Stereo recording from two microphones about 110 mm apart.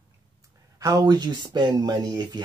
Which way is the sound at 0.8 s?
35° right (ahead or behind).